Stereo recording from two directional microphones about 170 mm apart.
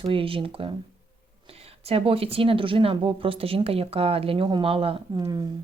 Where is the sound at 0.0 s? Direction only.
30° right (ahead or behind).